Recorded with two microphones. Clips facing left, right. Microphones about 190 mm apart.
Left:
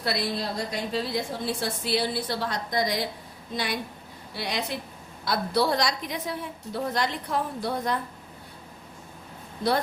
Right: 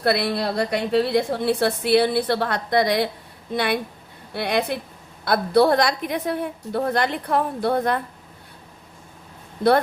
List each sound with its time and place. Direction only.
0.0 s a woman's voice: 60° right (ahead or behind)